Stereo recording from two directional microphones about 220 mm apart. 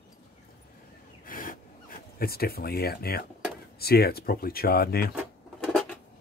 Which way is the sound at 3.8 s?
45° left (ahead or behind).